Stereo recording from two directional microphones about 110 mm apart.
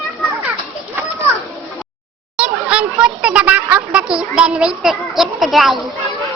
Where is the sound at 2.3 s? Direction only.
10° right (ahead or behind).